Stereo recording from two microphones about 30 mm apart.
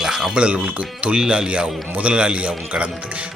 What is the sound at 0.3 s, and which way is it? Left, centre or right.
Speech, right.